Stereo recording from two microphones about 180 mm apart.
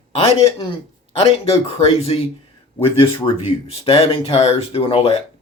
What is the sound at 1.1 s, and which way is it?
Speech, 35° left (ahead or behind).